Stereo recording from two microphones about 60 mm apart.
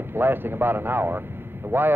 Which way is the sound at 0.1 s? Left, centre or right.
Right.